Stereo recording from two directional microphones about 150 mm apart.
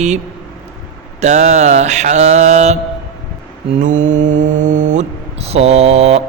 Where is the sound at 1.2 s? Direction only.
50° right (ahead or behind).